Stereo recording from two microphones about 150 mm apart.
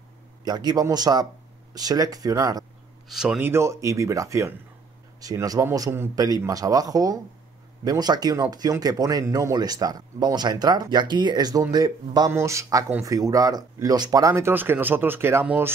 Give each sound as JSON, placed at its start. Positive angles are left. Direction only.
{"t": 0.5, "sound": "speech", "side_deg": -25}
{"t": 3.1, "sound": "speech", "side_deg": -5}
{"t": 3.4, "sound": "speech", "side_deg": -20}